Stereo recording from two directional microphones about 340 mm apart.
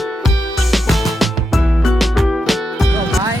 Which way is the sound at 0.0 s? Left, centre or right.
Centre.